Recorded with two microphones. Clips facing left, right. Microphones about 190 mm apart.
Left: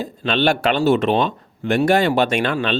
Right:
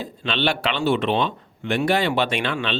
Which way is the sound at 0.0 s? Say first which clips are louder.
Left 5 dB; 45° left (ahead or behind).